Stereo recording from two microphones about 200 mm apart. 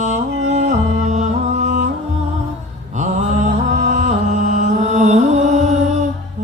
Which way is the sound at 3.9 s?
40° right (ahead or behind).